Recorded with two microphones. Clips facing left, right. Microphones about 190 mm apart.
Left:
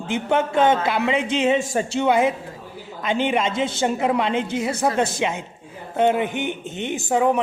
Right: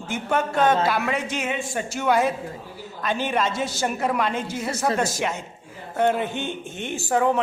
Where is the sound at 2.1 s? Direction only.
20° left (ahead or behind).